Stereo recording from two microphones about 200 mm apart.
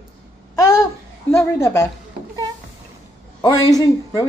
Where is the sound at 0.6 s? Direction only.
20° left (ahead or behind).